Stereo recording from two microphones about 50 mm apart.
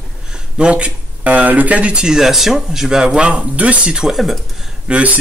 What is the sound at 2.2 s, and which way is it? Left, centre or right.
Speech, centre.